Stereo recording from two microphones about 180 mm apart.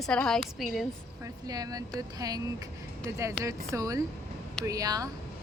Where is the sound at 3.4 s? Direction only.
15° right (ahead or behind).